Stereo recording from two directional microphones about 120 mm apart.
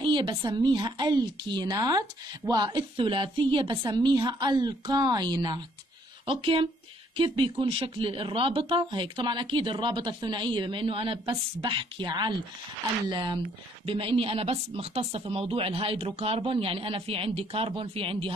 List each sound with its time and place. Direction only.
0.0 s speech: 40° right (ahead or behind)
6.2 s speech: 50° right (ahead or behind)